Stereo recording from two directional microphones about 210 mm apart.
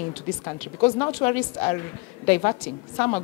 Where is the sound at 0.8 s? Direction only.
20° left (ahead or behind).